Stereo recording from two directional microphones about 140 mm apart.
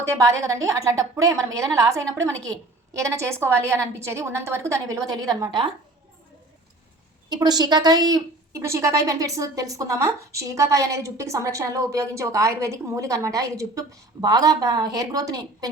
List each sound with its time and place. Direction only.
0.0 s a woman's voice: 20° right (ahead or behind)
7.3 s a woman's voice: 30° right (ahead or behind)